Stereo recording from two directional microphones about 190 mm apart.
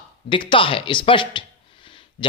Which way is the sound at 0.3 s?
25° left (ahead or behind).